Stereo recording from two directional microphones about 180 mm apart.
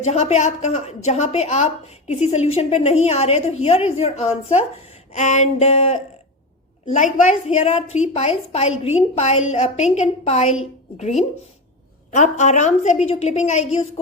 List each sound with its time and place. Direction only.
0.0 s a woman's voice: 35° left (ahead or behind)